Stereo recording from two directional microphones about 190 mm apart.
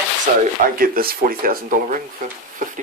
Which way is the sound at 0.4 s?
50° right (ahead or behind).